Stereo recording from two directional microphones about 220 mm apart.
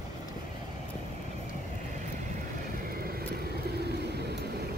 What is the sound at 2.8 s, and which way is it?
Vehicle, 40° right (ahead or behind).